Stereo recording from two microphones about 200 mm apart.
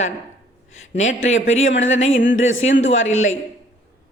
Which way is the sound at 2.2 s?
70° left (ahead or behind).